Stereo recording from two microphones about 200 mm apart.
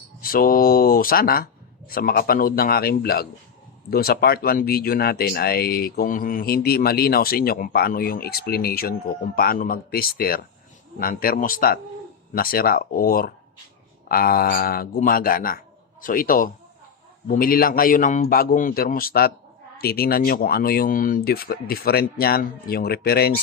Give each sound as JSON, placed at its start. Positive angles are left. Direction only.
{"t": 0.2, "sound": "speech", "side_deg": 45}